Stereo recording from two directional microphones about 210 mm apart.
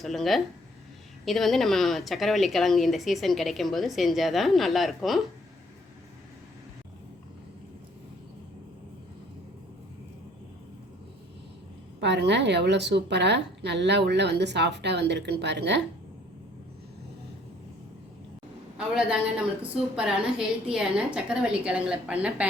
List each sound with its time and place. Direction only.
0.0 s speech: centre (ahead or behind)
11.9 s a woman's voice: 55° right (ahead or behind)
18.9 s speech: 5° right (ahead or behind)